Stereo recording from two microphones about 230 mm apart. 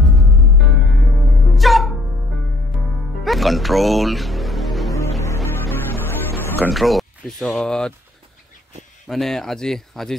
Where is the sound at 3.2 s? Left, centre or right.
Centre.